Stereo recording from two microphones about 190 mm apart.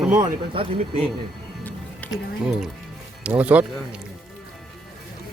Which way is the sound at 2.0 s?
10° left (ahead or behind).